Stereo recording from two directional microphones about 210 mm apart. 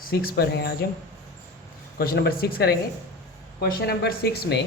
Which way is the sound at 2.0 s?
45° left (ahead or behind).